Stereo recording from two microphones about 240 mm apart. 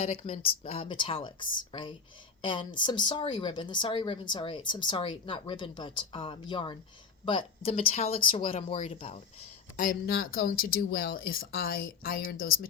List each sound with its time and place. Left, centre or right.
0.0 s a woman's voice: left